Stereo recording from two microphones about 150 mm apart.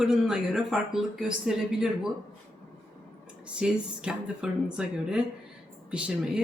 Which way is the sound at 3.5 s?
5° right (ahead or behind).